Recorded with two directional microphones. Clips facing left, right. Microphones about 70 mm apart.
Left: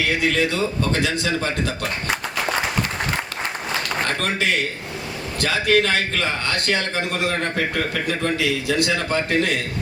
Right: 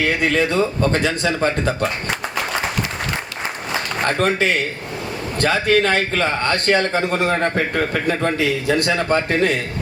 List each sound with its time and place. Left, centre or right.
0.0 s a man's voice: right
4.0 s a man's voice: right